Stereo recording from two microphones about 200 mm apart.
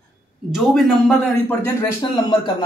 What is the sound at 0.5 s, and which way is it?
A man's voice, centre (ahead or behind).